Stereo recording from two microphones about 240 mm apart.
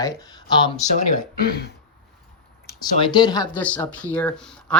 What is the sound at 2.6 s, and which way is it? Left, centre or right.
Speech, centre.